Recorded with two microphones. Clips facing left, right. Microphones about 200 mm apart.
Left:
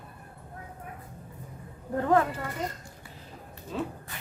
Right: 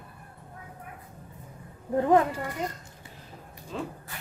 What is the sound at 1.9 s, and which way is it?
Speech, 20° right (ahead or behind).